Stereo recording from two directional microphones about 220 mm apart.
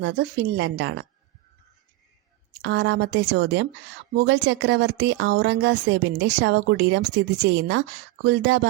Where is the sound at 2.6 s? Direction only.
55° right (ahead or behind).